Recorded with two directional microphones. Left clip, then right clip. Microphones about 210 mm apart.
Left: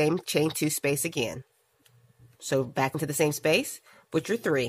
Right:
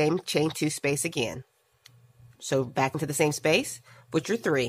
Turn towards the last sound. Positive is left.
turn(degrees=0)  # may be behind; listen again after turning